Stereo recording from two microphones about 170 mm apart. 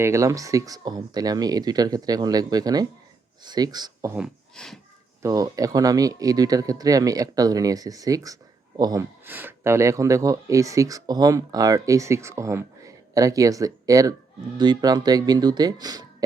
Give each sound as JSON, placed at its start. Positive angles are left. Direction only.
{"t": 0.0, "sound": "speech", "side_deg": -15}
{"t": 4.5, "sound": "speech", "side_deg": 5}
{"t": 5.2, "sound": "speech", "side_deg": -20}